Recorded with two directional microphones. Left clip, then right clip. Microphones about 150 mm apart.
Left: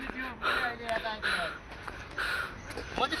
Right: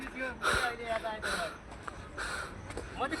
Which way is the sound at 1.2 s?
30° right (ahead or behind).